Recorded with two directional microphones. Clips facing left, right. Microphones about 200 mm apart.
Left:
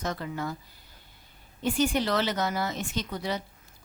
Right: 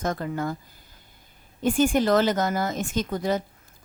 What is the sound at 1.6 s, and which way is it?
Speech, 50° right (ahead or behind).